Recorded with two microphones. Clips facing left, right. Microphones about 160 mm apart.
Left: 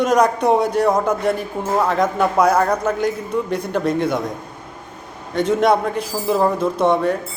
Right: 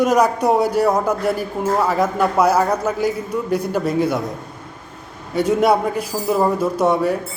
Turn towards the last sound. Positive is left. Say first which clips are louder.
# even
turn(degrees=-5)  # may be behind; listen again after turning